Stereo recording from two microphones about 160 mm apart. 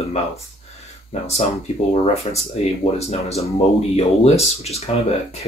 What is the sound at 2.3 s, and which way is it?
Speech, 40° left (ahead or behind).